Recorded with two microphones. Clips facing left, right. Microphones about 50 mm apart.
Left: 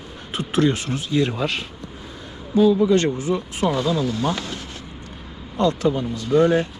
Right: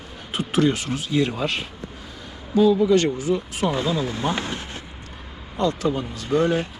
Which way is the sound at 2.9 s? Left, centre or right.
Left.